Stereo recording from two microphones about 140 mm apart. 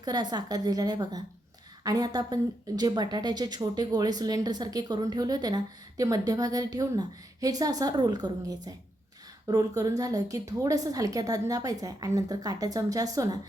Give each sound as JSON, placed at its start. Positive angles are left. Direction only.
{"t": 0.0, "sound": "a woman's voice", "side_deg": -30}